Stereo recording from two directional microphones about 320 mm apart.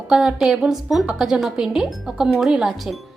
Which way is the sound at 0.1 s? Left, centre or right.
Centre.